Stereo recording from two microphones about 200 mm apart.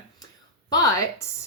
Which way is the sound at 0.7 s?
15° left (ahead or behind).